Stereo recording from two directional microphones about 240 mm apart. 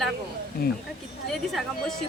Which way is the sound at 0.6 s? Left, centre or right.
Left.